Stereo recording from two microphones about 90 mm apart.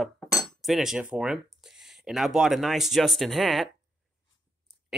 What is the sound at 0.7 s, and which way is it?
Speech, 5° right (ahead or behind).